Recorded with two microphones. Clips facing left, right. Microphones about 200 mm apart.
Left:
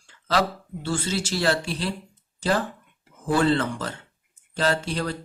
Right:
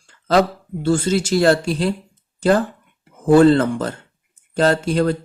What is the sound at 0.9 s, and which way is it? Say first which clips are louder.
Speech: right 9 dB; 45° right (ahead or behind).